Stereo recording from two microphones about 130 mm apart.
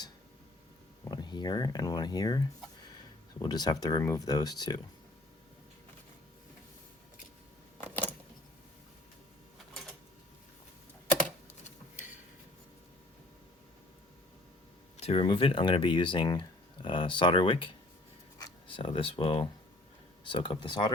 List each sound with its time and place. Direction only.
1.0 s speech: 30° left (ahead or behind)
3.4 s speech: 30° left (ahead or behind)
14.9 s speech: 50° left (ahead or behind)